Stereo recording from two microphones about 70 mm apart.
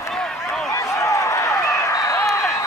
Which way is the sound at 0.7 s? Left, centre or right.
Left.